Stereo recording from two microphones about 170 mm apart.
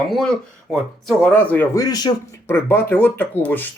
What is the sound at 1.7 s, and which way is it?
Speech, 20° left (ahead or behind).